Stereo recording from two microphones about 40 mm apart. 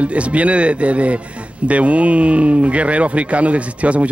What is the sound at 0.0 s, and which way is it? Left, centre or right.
Speech, right.